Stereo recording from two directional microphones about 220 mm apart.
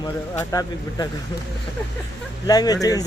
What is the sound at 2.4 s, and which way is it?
Speech, 15° left (ahead or behind).